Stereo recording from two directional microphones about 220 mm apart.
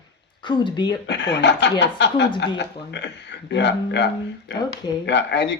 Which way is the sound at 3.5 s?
50° left (ahead or behind).